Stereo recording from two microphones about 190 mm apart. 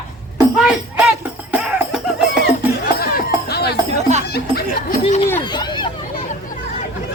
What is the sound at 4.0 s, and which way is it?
Speech, 35° right (ahead or behind).